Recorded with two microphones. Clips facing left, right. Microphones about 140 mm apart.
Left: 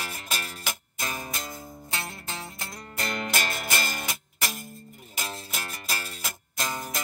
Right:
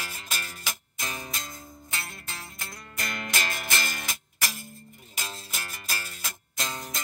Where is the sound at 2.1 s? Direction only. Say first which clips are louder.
Left 5 dB; 30° left (ahead or behind).